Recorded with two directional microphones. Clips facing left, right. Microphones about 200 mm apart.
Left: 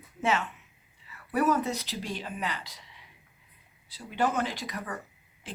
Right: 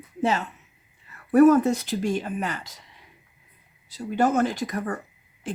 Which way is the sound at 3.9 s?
45° right (ahead or behind).